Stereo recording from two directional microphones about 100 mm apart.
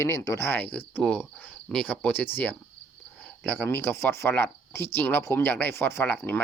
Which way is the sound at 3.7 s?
25° left (ahead or behind).